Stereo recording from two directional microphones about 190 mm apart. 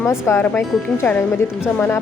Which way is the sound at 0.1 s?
15° left (ahead or behind).